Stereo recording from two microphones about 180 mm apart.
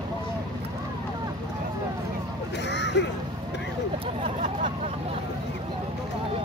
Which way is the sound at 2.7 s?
75° left (ahead or behind).